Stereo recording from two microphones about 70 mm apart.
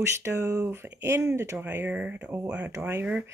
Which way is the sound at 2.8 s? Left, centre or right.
Right.